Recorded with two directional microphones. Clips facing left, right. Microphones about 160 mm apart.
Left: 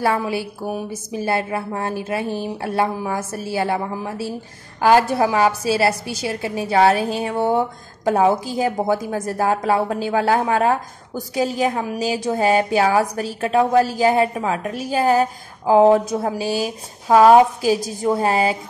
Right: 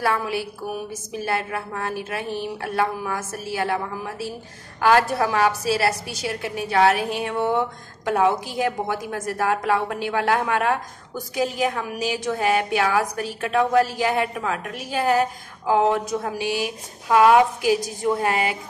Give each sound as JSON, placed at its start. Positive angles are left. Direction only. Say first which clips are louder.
{"t": 0.0, "sound": "a woman's voice", "louder": "left 3 dB", "side_deg": 25}